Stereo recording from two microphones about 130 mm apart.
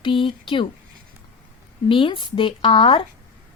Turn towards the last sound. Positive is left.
turn(degrees=40)  # may be behind; listen again after turning